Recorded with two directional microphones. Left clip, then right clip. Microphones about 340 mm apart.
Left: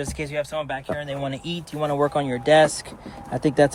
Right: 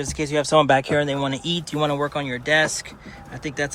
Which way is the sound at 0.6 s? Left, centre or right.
Right.